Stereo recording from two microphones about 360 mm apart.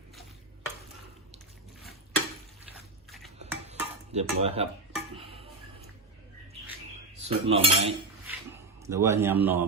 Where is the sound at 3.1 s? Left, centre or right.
Centre.